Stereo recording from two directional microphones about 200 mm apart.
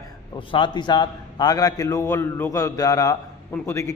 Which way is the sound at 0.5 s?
25° left (ahead or behind).